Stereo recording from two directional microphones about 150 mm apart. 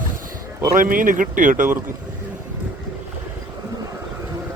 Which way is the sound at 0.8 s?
65° right (ahead or behind).